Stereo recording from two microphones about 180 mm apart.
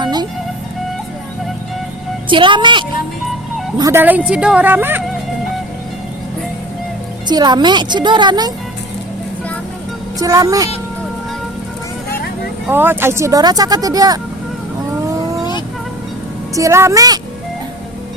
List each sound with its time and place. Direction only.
0.0 s music: 25° right (ahead or behind)
2.3 s a woman's voice: 25° right (ahead or behind); by 5.0 s 10° right (ahead or behind)
7.3 s speech: 25° right (ahead or behind)
10.2 s speech: 20° right (ahead or behind)
12.6 s speech: 10° right (ahead or behind)
16.6 s a woman's voice: 15° right (ahead or behind)